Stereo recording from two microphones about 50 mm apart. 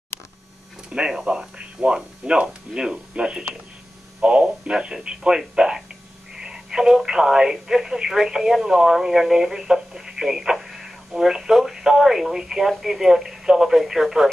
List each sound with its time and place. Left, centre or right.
0.8 s speech: centre
6.3 s telephone: centre
7.1 s speech: centre